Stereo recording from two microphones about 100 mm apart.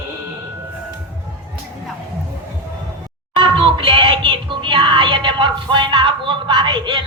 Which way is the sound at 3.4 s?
55° right (ahead or behind).